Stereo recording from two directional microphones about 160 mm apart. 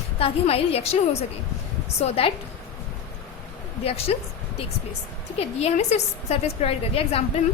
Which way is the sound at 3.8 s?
40° left (ahead or behind).